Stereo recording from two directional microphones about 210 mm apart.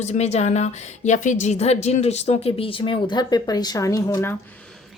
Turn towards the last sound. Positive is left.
turn(degrees=15)  # may be behind; listen again after turning